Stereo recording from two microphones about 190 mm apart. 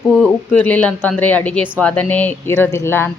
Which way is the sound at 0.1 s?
Centre (ahead or behind).